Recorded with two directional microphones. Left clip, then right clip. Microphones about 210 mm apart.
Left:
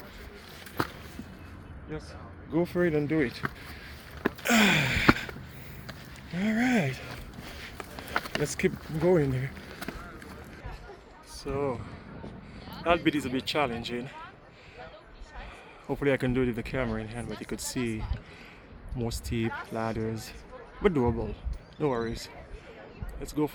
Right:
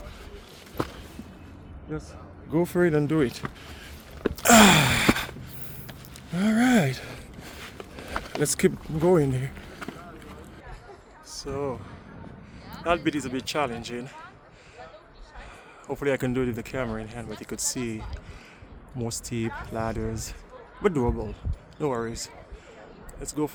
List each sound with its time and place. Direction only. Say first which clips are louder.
2.5 s speech: right 4 dB; 40° right (ahead or behind)
4.4 s gasp: right 8 dB; 40° right (ahead or behind)
6.3 s gasp: right 5 dB; 35° right (ahead or behind)
8.4 s speech: right 7 dB; 40° right (ahead or behind)
9.0 s speech: right 3 dB; 25° right (ahead or behind)
11.3 s speech: even; centre (ahead or behind)
15.9 s speech: right 1 dB; 5° right (ahead or behind)